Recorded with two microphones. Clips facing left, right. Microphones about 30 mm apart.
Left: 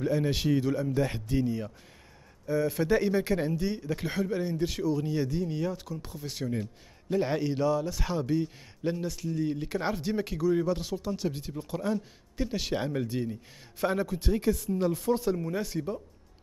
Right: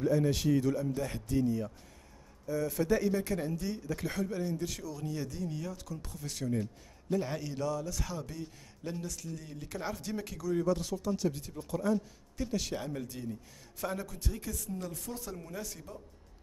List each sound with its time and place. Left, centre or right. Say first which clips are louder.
0.0 s a man's voice: left 1 dB; left